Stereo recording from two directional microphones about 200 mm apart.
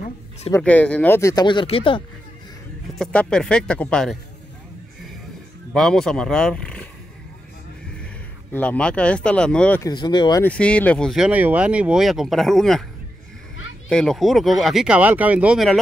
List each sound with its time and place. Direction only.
0.5 s speech: 10° left (ahead or behind); by 2.0 s 25° left (ahead or behind)
3.0 s speech: 5° left (ahead or behind)
5.7 s speech: 5° left (ahead or behind)
8.0 s speech: 5° left (ahead or behind)
9.8 s speech: 20° left (ahead or behind)
10.4 s speech: 5° left (ahead or behind)
13.8 s speech: centre (ahead or behind)